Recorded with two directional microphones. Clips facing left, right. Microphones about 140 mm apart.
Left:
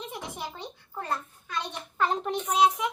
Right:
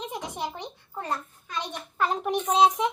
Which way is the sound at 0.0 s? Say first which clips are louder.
Right 4 dB; 20° right (ahead or behind).